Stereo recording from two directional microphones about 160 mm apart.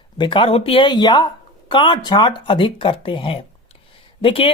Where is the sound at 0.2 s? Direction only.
30° left (ahead or behind).